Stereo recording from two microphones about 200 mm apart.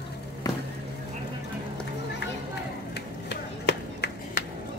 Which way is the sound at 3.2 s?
60° left (ahead or behind).